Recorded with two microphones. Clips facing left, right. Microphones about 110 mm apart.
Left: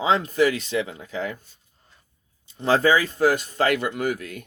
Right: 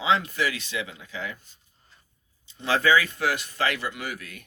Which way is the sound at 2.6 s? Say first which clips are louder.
Left 3 dB; 40° left (ahead or behind).